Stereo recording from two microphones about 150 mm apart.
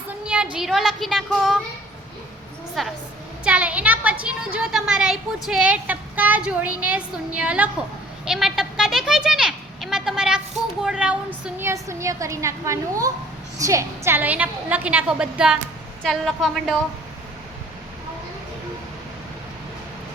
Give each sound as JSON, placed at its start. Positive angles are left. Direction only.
{"t": 0.5, "sound": "a woman's voice", "side_deg": -5}
{"t": 2.8, "sound": "a woman's voice", "side_deg": 0}
{"t": 8.2, "sound": "a sound", "side_deg": -5}
{"t": 10.8, "sound": "a woman's voice", "side_deg": -5}